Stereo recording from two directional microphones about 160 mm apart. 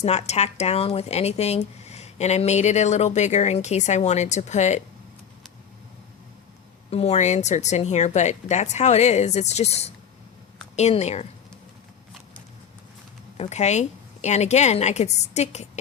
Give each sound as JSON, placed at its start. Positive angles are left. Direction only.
{"t": 0.0, "sound": "speech", "side_deg": 45}
{"t": 6.9, "sound": "speech", "side_deg": 40}
{"t": 13.3, "sound": "speech", "side_deg": 45}